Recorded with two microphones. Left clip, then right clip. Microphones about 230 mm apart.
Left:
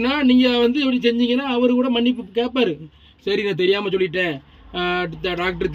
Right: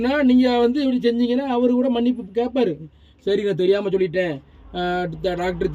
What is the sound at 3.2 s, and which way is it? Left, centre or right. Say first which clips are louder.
Speech: even; centre.